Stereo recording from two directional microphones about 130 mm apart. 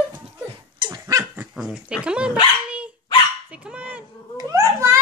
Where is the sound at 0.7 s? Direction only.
30° right (ahead or behind).